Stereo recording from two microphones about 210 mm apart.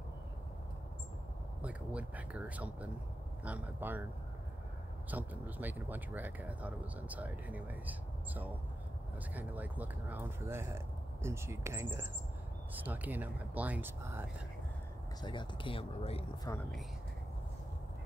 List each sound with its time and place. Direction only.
1.6 s speech: 5° right (ahead or behind)
5.1 s speech: 10° right (ahead or behind)
9.3 s speech: 10° right (ahead or behind)
15.2 s speech: 25° left (ahead or behind)
16.5 s speech: 15° left (ahead or behind)